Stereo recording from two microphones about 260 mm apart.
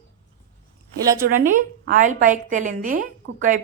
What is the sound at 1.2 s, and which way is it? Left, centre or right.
A woman's voice, right.